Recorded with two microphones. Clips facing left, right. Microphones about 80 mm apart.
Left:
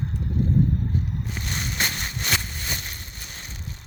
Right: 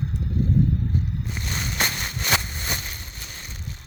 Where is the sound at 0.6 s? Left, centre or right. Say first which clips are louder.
Even; left.